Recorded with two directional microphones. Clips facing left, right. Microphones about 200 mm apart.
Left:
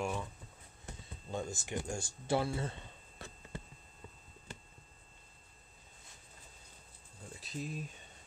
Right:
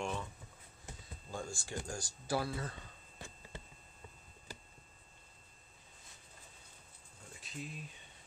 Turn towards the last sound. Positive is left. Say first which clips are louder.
# left 4 dB
turn(degrees=35)  # may be behind; listen again after turning